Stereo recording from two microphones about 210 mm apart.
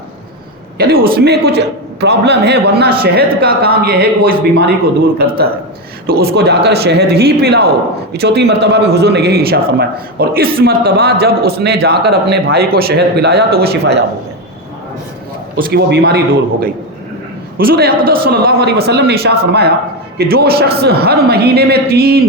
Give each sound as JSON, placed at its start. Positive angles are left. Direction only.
{"t": 0.8, "sound": "a man's voice", "side_deg": -45}
{"t": 6.1, "sound": "a man's voice", "side_deg": -45}
{"t": 15.5, "sound": "a man's voice", "side_deg": -50}